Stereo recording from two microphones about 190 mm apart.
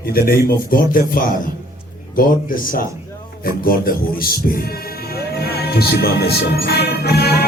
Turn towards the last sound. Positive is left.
turn(degrees=60)  # may be behind; listen again after turning